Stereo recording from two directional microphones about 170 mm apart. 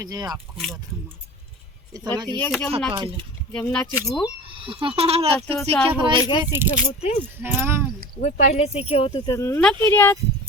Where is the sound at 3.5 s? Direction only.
5° left (ahead or behind).